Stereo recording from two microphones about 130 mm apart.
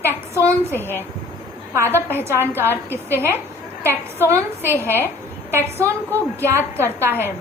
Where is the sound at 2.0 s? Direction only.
20° right (ahead or behind).